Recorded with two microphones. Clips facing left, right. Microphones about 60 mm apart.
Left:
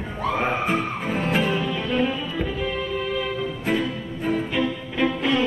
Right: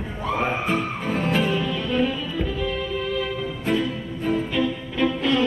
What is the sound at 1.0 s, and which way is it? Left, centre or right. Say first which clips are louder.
Music: even; centre.